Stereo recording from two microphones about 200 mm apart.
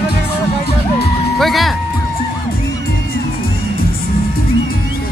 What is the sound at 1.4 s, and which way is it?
Music, centre (ahead or behind).